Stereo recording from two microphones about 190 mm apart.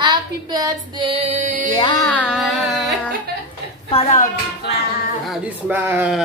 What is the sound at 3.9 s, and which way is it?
Speech, 35° left (ahead or behind).